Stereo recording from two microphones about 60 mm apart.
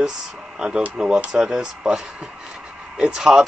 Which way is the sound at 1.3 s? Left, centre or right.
Centre.